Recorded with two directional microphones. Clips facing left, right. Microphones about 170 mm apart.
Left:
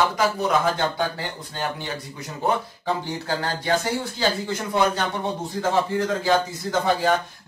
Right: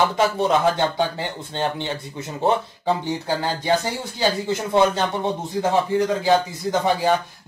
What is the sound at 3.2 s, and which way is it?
A man's voice, 20° right (ahead or behind).